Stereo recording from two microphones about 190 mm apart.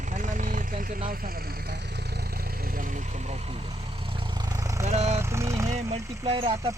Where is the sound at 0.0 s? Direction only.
40° right (ahead or behind); by 4.9 s 15° right (ahead or behind).